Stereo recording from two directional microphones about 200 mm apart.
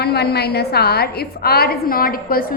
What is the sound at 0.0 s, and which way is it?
A woman's voice, 55° left (ahead or behind).